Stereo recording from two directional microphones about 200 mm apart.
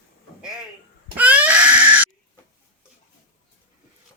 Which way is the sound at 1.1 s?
5° right (ahead or behind).